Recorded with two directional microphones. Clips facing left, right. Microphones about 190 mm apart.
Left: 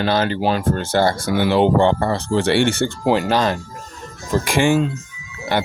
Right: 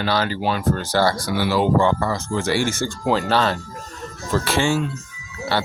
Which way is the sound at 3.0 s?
15° left (ahead or behind).